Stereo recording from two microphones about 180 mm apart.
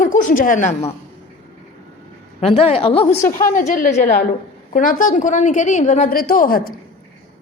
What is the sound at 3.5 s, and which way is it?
A woman's voice, 50° left (ahead or behind).